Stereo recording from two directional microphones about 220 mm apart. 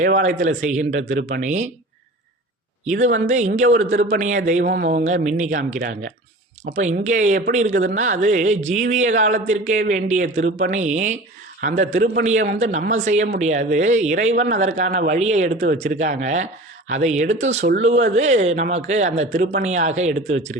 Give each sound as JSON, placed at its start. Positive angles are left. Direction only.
{"t": 0.0, "sound": "a woman's voice", "side_deg": -35}
{"t": 2.8, "sound": "a woman's voice", "side_deg": -35}
{"t": 4.6, "sound": "speech", "side_deg": -50}
{"t": 4.9, "sound": "a woman's voice", "side_deg": -35}